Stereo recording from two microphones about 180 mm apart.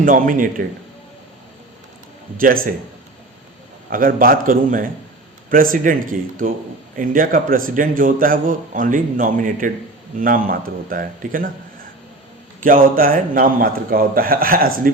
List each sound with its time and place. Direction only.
0.0 s a man's voice: 50° right (ahead or behind)
2.4 s a man's voice: 50° right (ahead or behind)
3.8 s a man's voice: 50° right (ahead or behind)
12.6 s a man's voice: 50° right (ahead or behind)